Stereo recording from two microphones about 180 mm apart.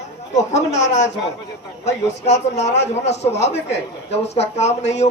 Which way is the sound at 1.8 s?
40° left (ahead or behind).